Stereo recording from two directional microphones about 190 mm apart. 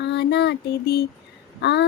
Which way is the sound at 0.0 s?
65° left (ahead or behind).